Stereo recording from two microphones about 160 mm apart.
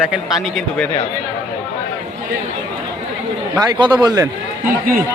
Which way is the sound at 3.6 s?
25° right (ahead or behind).